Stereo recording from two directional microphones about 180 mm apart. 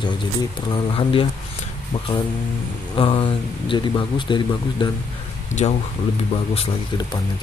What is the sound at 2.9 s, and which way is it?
A man's voice, 30° left (ahead or behind).